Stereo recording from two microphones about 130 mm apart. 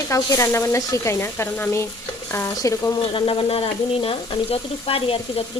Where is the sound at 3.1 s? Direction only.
45° left (ahead or behind).